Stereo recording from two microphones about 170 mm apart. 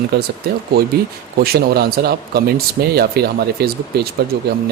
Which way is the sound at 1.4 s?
65° right (ahead or behind).